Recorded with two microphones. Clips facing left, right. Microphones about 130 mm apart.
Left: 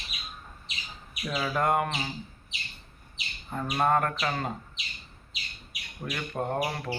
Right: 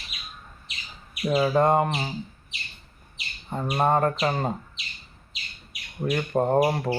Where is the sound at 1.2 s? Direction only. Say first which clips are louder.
Right 8 dB; 30° right (ahead or behind).